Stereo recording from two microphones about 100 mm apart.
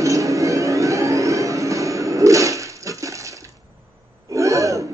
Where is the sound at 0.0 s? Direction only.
30° right (ahead or behind).